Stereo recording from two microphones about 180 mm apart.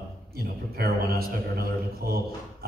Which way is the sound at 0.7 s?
60° right (ahead or behind).